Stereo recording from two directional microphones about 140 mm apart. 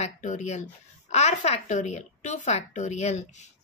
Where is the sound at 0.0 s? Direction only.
60° left (ahead or behind).